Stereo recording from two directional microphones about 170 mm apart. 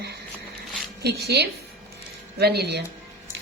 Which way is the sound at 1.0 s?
75° right (ahead or behind).